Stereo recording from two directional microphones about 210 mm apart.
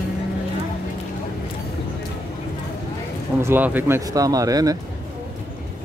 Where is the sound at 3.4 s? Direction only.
10° right (ahead or behind).